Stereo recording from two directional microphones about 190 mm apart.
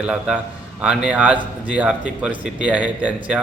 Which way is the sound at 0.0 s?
5° right (ahead or behind).